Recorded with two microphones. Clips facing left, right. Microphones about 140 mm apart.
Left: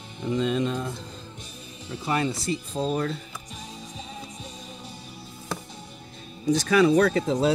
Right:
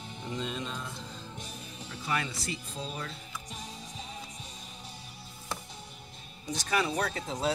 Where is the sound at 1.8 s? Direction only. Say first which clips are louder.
Left 8 dB; 35° left (ahead or behind).